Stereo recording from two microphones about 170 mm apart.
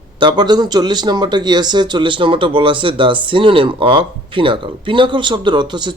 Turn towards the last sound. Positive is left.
turn(degrees=-25)  # may be behind; listen again after turning